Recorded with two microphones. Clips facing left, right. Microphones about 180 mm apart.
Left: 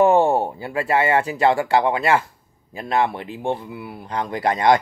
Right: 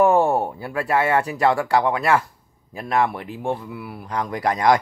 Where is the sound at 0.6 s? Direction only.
25° left (ahead or behind).